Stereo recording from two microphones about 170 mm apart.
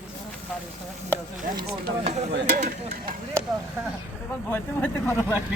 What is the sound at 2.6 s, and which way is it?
Speech, 50° right (ahead or behind).